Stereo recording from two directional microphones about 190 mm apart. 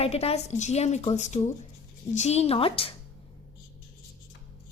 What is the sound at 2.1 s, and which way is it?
Speech, 35° left (ahead or behind).